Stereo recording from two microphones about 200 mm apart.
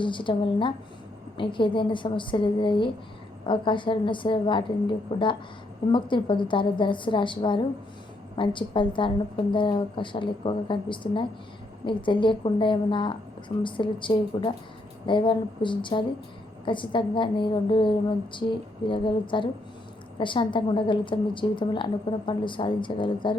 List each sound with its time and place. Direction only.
0.0 s a woman's voice: 25° left (ahead or behind)